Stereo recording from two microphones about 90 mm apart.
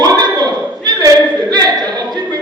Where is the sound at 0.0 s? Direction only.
45° right (ahead or behind).